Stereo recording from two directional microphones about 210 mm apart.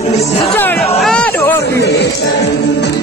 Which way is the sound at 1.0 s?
5° left (ahead or behind).